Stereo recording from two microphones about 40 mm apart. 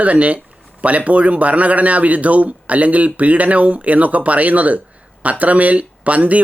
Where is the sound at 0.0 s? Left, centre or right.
Right.